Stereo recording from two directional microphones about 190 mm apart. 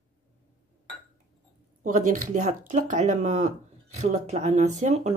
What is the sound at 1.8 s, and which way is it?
Speech, 40° right (ahead or behind).